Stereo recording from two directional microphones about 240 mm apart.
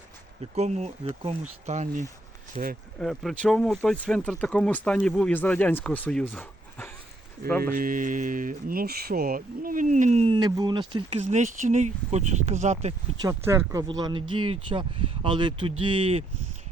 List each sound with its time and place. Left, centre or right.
0.5 s speech: right
3.0 s speech: centre
7.6 s speech: right; by 11.0 s centre
11.2 s speech: right
13.2 s speech: centre